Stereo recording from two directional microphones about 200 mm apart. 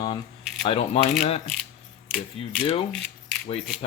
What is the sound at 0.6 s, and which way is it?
Speech, 30° left (ahead or behind).